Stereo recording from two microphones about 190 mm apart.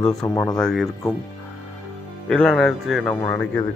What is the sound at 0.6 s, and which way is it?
Speech, centre (ahead or behind).